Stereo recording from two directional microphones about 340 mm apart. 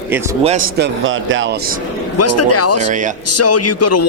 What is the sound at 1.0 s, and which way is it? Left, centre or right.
Speech, right.